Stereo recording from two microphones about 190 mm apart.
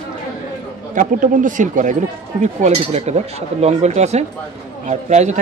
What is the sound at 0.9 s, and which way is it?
Speech, 45° right (ahead or behind).